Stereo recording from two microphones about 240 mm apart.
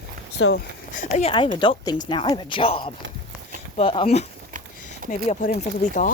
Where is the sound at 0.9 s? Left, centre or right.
Left.